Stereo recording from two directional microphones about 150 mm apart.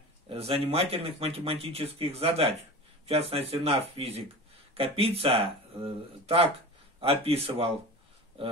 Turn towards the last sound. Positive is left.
turn(degrees=-40)  # may be behind; listen again after turning